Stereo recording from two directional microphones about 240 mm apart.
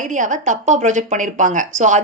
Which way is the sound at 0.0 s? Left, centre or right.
Right.